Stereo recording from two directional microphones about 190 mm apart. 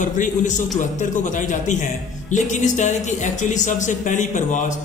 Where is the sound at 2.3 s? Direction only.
40° left (ahead or behind).